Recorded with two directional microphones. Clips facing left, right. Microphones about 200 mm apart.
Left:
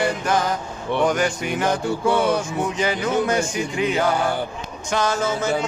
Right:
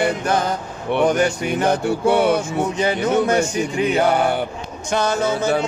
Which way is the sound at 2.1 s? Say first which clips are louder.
Right 3 dB; 65° right (ahead or behind).